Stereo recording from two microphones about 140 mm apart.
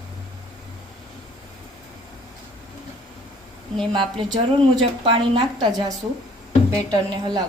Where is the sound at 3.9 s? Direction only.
35° right (ahead or behind).